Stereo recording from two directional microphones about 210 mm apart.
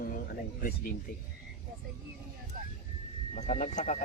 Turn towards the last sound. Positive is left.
turn(degrees=35)  # may be behind; listen again after turning